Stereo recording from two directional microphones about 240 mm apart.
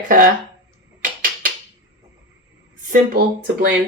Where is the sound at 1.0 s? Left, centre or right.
Right.